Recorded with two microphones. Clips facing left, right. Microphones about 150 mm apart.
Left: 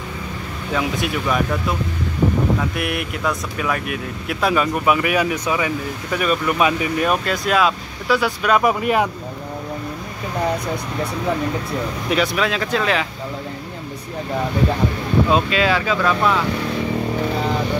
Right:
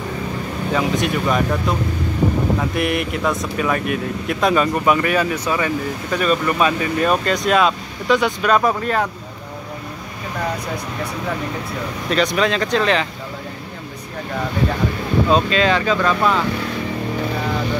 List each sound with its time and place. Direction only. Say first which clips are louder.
0.7 s speech: right 2 dB; centre (ahead or behind)
12.4 s speech: right 2 dB; 5° left (ahead or behind)
15.2 s speech: right 4 dB; 5° left (ahead or behind)